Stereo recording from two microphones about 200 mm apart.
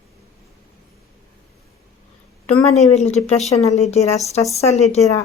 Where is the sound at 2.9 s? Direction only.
35° left (ahead or behind).